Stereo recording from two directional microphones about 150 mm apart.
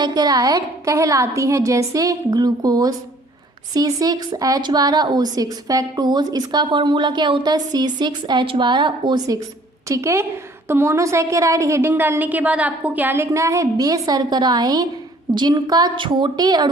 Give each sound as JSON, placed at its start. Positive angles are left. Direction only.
{"t": 0.0, "sound": "a woman's voice", "side_deg": -25}